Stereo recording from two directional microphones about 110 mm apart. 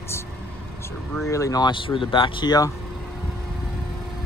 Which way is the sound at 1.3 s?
30° left (ahead or behind).